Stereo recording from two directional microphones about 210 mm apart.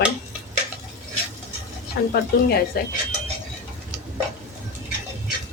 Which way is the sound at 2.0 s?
55° left (ahead or behind).